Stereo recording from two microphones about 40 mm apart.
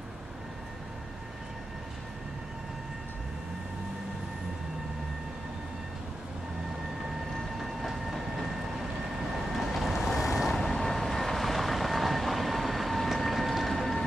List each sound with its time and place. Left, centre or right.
7.5 s train: centre
9.5 s vehicle: centre